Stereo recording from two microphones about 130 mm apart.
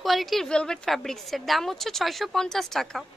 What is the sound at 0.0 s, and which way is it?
A woman's voice, centre (ahead or behind).